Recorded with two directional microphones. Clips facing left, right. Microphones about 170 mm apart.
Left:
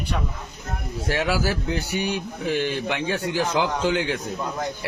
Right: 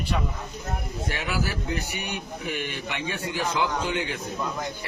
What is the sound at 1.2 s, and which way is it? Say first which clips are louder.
A man's voice: left 7 dB; 85° left.